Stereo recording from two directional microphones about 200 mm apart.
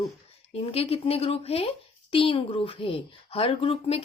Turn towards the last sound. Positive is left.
turn(degrees=30)  # may be behind; listen again after turning